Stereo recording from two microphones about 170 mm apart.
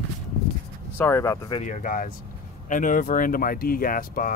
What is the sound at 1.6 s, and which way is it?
Speech, 50° left (ahead or behind).